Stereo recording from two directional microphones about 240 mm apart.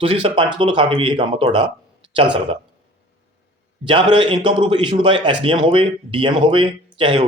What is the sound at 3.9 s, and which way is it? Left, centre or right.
A man's voice, centre.